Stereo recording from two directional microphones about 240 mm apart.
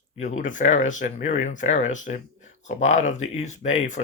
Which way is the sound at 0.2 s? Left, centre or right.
Left.